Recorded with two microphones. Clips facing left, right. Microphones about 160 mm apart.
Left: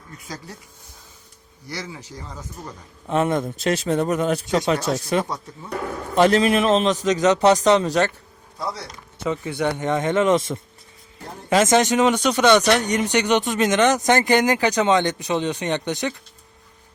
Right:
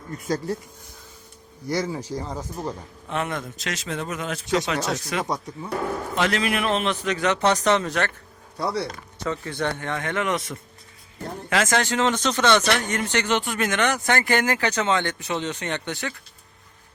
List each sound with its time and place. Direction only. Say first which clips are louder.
0.1 s speech: right 10 dB; 50° right (ahead or behind)
1.7 s speech: right 8 dB; 45° right (ahead or behind)
3.1 s speech: left 7 dB; 25° left (ahead or behind)
4.6 s speech: left 5 dB; 30° left (ahead or behind)
8.5 s speech: right 3 dB; 65° right (ahead or behind)
9.2 s speech: left 4 dB; 10° left (ahead or behind)